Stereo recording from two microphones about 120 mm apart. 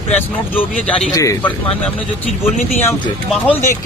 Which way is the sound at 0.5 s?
10° left (ahead or behind).